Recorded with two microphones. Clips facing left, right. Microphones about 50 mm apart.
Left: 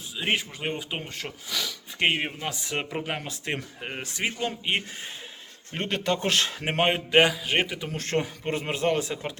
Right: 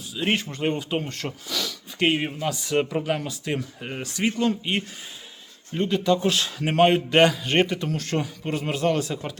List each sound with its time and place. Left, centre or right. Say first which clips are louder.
0.2 s speech: right 3 dB; centre
3.2 s speech: right 3 dB; left
3.8 s speech: right 3 dB; centre
5.7 s speech: right 5 dB; left
6.7 s speech: right 8 dB; left
7.9 s speech: right 1 dB; left